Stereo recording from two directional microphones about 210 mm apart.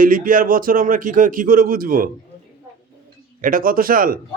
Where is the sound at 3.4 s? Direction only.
40° right (ahead or behind).